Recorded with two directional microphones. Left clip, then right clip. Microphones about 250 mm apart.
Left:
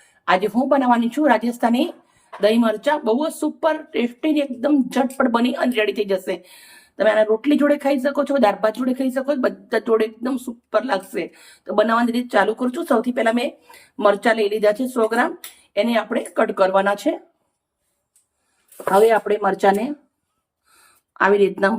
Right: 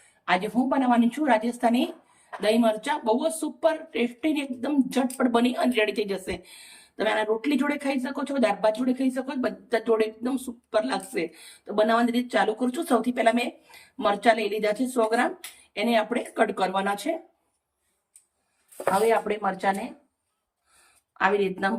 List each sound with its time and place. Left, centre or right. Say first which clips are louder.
0.3 s a woman's voice: left 7 dB; centre
19.3 s a woman's voice: left 8 dB; left
21.2 s a woman's voice: left 8 dB; left